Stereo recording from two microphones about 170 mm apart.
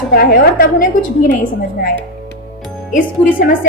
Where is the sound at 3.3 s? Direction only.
60° left (ahead or behind).